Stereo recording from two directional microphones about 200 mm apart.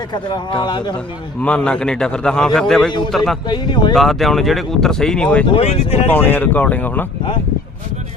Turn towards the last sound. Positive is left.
turn(degrees=10)  # may be behind; listen again after turning